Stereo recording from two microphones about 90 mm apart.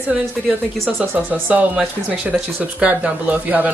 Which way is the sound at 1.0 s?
15° right (ahead or behind).